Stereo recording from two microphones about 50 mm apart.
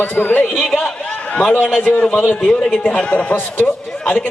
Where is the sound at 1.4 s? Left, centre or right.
Left.